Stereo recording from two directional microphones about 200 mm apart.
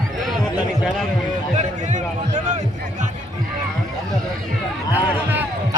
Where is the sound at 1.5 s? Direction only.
35° right (ahead or behind).